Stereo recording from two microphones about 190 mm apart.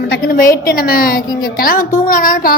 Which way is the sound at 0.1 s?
50° left (ahead or behind).